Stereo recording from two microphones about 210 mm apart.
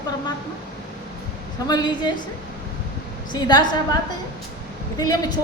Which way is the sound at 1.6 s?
20° left (ahead or behind).